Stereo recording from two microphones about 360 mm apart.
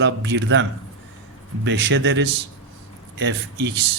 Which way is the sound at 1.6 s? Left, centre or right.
Right.